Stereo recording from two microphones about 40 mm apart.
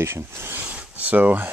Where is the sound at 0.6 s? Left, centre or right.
Right.